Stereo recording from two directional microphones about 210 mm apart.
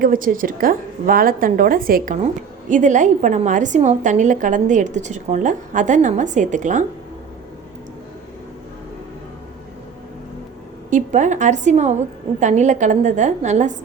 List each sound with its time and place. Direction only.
0.0 s a woman's voice: 40° right (ahead or behind)
10.8 s a woman's voice: 35° right (ahead or behind)